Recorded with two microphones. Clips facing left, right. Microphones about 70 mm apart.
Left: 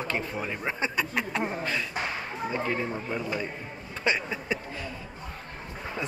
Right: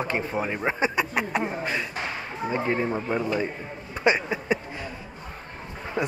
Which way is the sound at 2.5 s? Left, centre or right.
Right.